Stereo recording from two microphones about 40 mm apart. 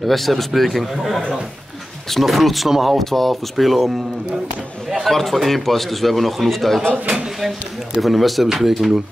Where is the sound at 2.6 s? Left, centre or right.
Centre.